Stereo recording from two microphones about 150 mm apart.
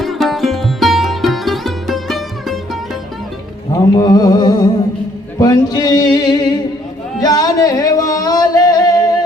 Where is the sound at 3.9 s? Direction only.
25° left (ahead or behind).